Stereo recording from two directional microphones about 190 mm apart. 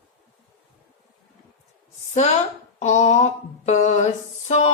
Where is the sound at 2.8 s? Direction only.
35° left (ahead or behind).